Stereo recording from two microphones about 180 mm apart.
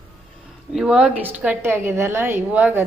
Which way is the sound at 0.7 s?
5° right (ahead or behind).